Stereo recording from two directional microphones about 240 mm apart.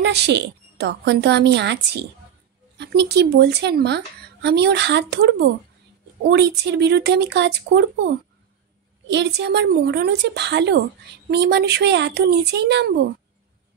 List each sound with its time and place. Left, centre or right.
0.0 s speech: right
9.1 s speech: right